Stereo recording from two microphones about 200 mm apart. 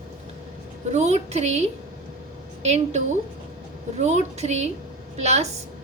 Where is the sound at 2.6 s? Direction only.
35° right (ahead or behind).